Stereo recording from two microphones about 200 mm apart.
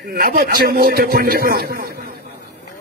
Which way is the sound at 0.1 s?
50° right (ahead or behind).